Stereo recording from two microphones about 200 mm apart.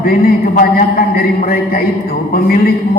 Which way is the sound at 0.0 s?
45° left (ahead or behind).